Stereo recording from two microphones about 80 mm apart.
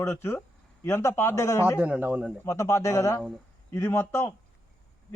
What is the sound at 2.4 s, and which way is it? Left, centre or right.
A man's voice, left.